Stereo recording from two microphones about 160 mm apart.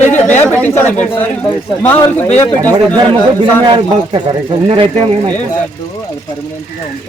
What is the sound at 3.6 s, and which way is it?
Speech, 30° right (ahead or behind).